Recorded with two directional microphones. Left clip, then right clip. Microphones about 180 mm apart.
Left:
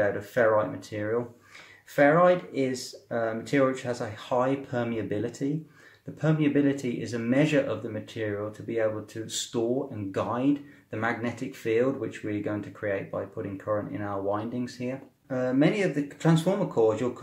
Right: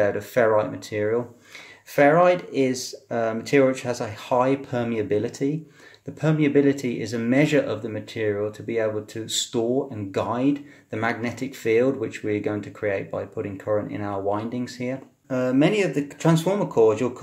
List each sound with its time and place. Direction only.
0.0 s speech: 30° right (ahead or behind)